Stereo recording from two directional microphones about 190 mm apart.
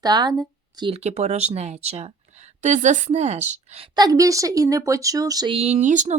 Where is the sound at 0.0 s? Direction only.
20° right (ahead or behind).